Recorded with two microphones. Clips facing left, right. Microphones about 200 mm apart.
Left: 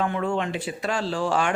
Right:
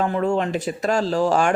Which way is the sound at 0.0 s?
40° right (ahead or behind).